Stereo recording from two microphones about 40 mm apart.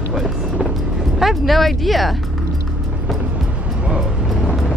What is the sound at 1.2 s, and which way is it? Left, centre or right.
Speech, centre.